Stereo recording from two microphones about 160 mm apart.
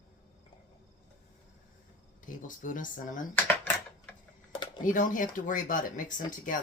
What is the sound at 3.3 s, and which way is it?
Typewriter, 10° left (ahead or behind).